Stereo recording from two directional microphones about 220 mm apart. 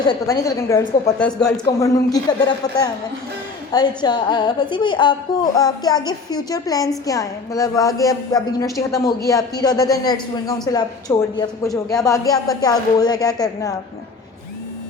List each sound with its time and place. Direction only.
0.1 s a woman's voice: 15° left (ahead or behind)
3.7 s a woman's voice: 20° left (ahead or behind)